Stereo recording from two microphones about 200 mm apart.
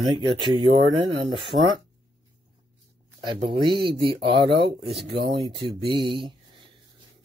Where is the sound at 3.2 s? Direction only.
25° right (ahead or behind).